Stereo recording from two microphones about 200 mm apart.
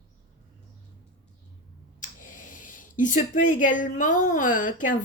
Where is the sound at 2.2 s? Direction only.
40° left (ahead or behind).